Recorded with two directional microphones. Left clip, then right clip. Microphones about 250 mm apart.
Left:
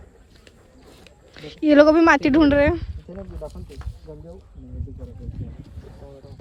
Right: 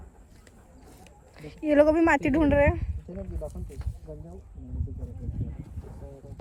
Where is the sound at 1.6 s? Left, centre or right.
Centre.